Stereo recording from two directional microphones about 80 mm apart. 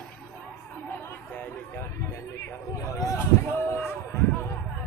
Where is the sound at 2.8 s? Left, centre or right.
Left.